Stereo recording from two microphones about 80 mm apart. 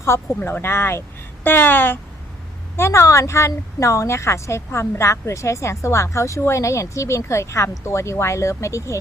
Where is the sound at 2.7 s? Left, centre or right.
Left.